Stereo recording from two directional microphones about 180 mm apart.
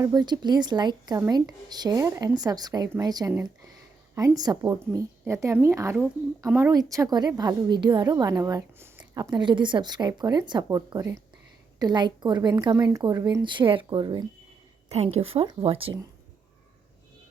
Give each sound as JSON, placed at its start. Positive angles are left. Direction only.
{"t": 0.0, "sound": "a woman's voice", "side_deg": -20}
{"t": 14.8, "sound": "a woman's voice", "side_deg": -35}